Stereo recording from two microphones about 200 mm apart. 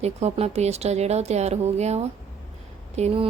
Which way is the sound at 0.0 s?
35° right (ahead or behind).